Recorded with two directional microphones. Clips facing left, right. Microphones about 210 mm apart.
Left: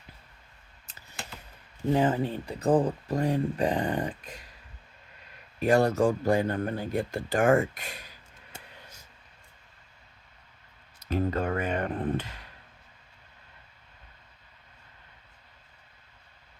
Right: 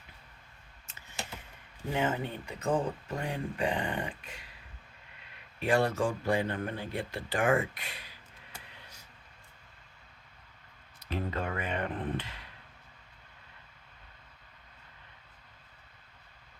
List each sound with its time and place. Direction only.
1.9 s speech: 35° left (ahead or behind)
5.5 s speech: 40° left (ahead or behind)
11.1 s speech: 45° left (ahead or behind)